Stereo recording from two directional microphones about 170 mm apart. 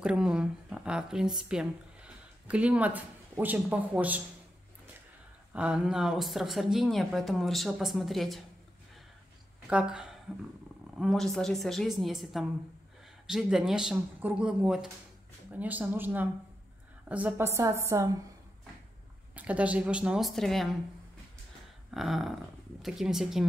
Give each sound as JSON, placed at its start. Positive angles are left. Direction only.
{"t": 0.0, "sound": "speech", "side_deg": -5}
{"t": 5.5, "sound": "speech", "side_deg": -5}
{"t": 9.7, "sound": "a woman's voice", "side_deg": -5}
{"t": 19.3, "sound": "a woman's voice", "side_deg": -10}
{"t": 21.9, "sound": "speech", "side_deg": 0}